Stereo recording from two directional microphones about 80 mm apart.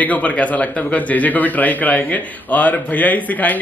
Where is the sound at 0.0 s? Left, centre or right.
Centre.